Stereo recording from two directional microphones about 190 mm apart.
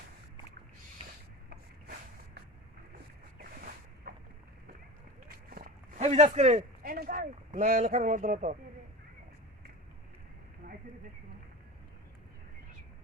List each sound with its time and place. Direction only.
4.1 s boat: 55° right (ahead or behind)
5.3 s run: 50° right (ahead or behind)
6.0 s speech: 35° right (ahead or behind)
6.8 s speech: 50° right (ahead or behind)
10.6 s a sound: 50° right (ahead or behind)